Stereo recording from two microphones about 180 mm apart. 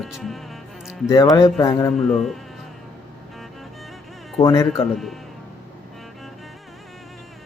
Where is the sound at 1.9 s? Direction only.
Centre (ahead or behind).